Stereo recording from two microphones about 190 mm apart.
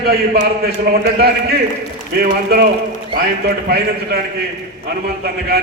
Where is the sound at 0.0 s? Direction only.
55° right (ahead or behind).